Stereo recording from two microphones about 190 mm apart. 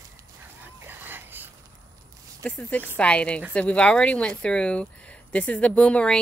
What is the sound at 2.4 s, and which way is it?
Speech, 5° left (ahead or behind).